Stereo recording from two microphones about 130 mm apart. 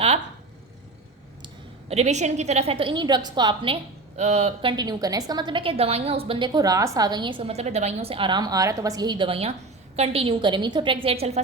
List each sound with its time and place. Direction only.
1.9 s a woman's voice: 55° right (ahead or behind); by 3.8 s 40° right (ahead or behind)
4.2 s a woman's voice: 55° right (ahead or behind)
4.8 s a woman's voice: 30° right (ahead or behind); by 11.3 s 50° right (ahead or behind)